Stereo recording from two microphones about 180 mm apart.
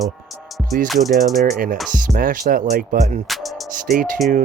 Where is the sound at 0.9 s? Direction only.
Centre (ahead or behind).